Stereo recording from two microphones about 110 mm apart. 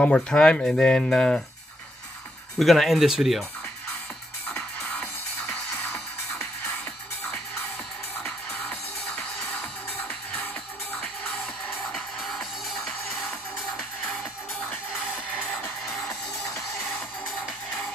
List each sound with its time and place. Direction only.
0.0 s speech: 10° left (ahead or behind)
2.6 s speech: centre (ahead or behind)
5.0 s music: 20° left (ahead or behind)
8.2 s music: 10° left (ahead or behind)
11.9 s music: centre (ahead or behind)